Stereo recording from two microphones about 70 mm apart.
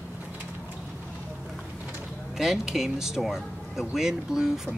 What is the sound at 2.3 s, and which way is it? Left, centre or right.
Speech, centre.